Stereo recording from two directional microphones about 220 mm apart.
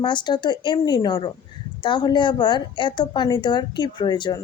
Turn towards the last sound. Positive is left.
turn(degrees=20)  # may be behind; listen again after turning